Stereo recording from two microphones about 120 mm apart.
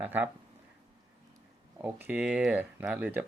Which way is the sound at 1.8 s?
10° right (ahead or behind).